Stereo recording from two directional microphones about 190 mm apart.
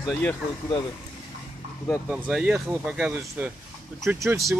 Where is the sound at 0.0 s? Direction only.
5° left (ahead or behind).